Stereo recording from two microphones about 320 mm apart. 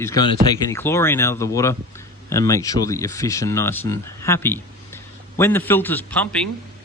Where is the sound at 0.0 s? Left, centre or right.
Centre.